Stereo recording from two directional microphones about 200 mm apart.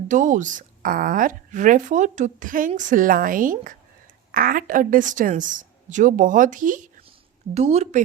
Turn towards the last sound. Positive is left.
turn(degrees=-30)  # may be behind; listen again after turning